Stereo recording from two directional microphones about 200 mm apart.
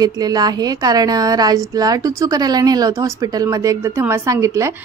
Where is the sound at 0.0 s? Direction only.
20° right (ahead or behind).